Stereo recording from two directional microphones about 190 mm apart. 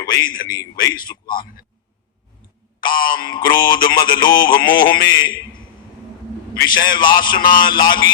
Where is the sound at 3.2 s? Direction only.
20° left (ahead or behind).